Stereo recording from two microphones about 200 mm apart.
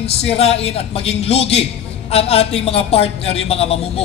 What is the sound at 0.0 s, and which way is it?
A man's voice, 30° left (ahead or behind).